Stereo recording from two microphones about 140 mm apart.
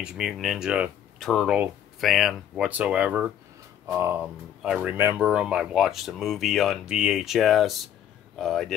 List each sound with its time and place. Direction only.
0.0 s speech: 5° right (ahead or behind)
1.2 s speech: 5° left (ahead or behind); by 4.2 s 15° right (ahead or behind)
4.2 s speech: 5° right (ahead or behind)